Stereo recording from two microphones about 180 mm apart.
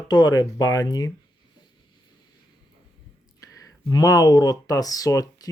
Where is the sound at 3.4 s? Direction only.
20° left (ahead or behind).